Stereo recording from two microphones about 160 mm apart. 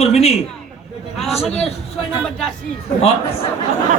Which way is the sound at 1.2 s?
Centre (ahead or behind).